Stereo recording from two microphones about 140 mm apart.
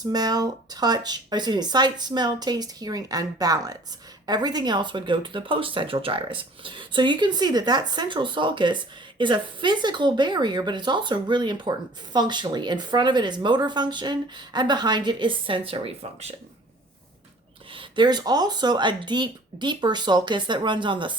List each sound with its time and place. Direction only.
0.0 s speech: 30° right (ahead or behind)
17.7 s speech: 35° right (ahead or behind)